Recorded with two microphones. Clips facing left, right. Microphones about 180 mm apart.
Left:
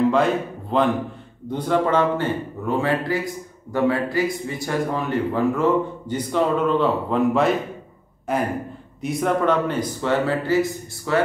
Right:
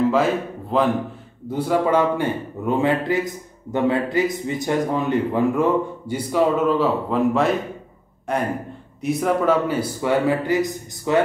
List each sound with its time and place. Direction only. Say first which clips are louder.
0.1 s a man's voice: even; centre (ahead or behind)